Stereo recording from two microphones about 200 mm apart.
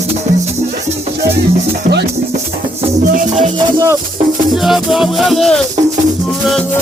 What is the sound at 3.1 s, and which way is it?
Music, 35° right (ahead or behind).